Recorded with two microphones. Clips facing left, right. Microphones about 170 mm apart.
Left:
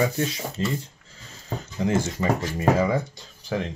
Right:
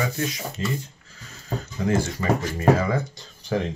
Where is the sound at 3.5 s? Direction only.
5° left (ahead or behind).